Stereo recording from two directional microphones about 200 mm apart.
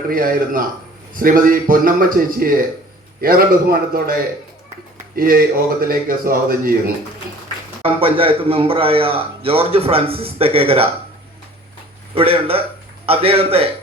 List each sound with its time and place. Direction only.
0.1 s speech: 45° right (ahead or behind)
7.8 s a man's voice: 30° right (ahead or behind)
12.1 s a man's voice: 30° right (ahead or behind)